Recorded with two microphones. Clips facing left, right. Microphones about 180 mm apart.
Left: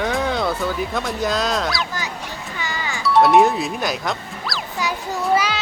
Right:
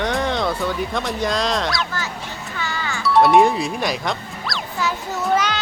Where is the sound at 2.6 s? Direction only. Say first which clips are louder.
Right 1 dB; 15° left (ahead or behind).